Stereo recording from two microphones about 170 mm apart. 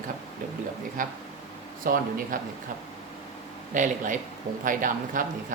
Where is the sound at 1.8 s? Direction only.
55° right (ahead or behind).